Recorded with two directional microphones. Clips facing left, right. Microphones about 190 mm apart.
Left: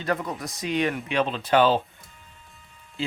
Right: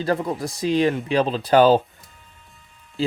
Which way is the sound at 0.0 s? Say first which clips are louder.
Right 5 dB; 30° right (ahead or behind).